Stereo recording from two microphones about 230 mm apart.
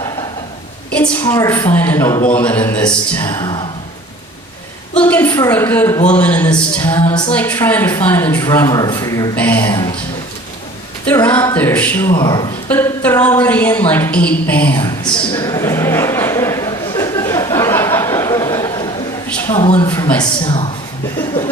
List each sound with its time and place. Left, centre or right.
0.9 s a woman's voice: centre
4.9 s a woman's voice: centre
7.0 s music: left
7.3 s a woman's voice: centre
11.0 s a woman's voice: centre
12.2 s music: centre
12.6 s a sound: centre
19.5 s music: left
19.9 s a woman's voice: centre